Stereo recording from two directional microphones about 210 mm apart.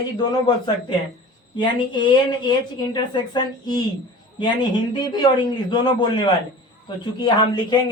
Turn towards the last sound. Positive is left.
turn(degrees=20)  # may be behind; listen again after turning